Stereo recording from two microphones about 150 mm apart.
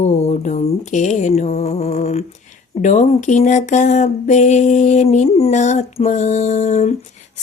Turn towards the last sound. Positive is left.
turn(degrees=50)  # may be behind; listen again after turning